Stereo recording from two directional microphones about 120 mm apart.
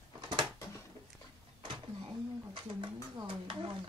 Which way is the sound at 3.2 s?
45° right (ahead or behind).